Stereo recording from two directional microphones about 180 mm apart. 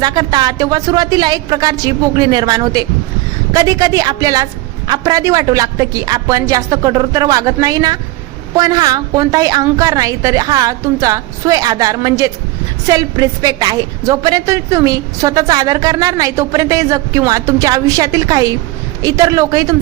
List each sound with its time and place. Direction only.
0.0 s a woman's voice: 25° right (ahead or behind)